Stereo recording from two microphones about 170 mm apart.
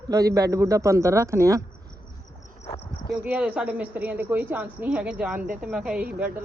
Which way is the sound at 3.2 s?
10° right (ahead or behind).